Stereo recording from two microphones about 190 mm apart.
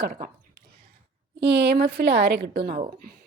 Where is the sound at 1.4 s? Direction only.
60° right (ahead or behind).